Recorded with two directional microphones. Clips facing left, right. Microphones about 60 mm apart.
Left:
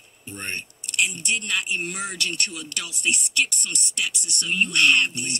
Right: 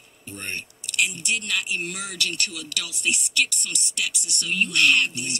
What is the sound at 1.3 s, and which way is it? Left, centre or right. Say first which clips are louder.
Speech: left 2 dB; left.